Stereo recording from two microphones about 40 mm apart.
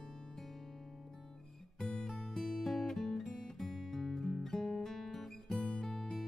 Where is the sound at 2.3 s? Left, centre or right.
Centre.